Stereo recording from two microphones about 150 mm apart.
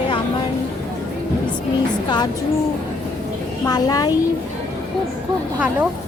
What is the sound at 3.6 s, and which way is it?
Speech, 25° left (ahead or behind).